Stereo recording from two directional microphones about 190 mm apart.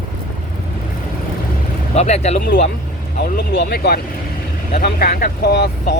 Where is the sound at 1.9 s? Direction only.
35° left (ahead or behind).